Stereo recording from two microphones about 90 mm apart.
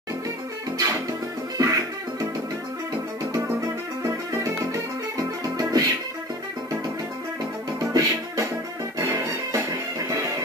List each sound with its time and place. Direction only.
0.7 s music: 35° right (ahead or behind)
3.6 s music: 35° right (ahead or behind)
5.1 s music: 40° right (ahead or behind)
7.8 s music: 40° right (ahead or behind)